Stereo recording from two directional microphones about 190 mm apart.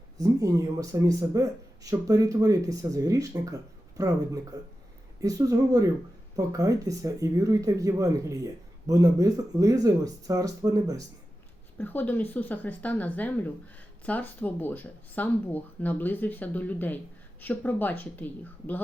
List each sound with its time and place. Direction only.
0.2 s speech: 20° right (ahead or behind)
11.8 s speech: 10° left (ahead or behind)